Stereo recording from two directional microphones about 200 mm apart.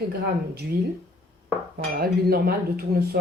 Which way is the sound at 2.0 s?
50° right (ahead or behind).